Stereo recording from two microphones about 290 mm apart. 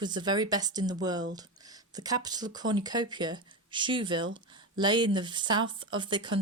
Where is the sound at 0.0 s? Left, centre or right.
Centre.